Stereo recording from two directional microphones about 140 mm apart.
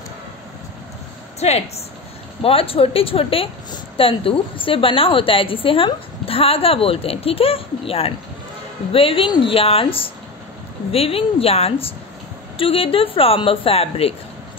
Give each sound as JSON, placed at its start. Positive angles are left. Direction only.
{"t": 1.4, "sound": "a woman's voice", "side_deg": 50}